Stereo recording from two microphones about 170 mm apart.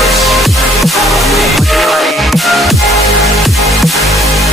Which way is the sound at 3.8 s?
Centre (ahead or behind).